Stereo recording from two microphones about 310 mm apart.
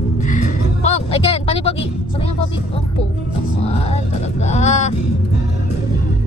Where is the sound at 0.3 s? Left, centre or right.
Left.